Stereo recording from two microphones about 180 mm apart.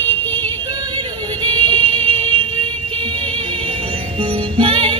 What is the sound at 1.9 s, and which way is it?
Fire alarm, 10° left (ahead or behind).